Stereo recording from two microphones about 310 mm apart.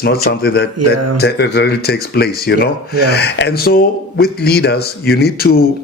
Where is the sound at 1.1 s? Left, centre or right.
Left.